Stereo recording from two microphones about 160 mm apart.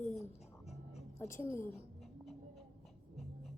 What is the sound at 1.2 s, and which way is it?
Speech, 15° left (ahead or behind).